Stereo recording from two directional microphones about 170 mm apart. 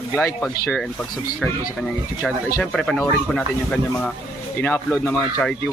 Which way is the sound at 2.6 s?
5° left (ahead or behind).